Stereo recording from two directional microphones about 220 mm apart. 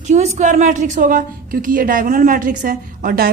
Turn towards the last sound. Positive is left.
turn(degrees=-40)  # may be behind; listen again after turning